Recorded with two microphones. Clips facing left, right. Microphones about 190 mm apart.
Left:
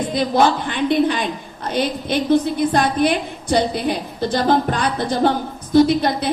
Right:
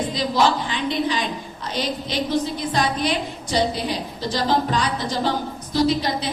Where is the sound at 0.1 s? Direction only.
55° left (ahead or behind).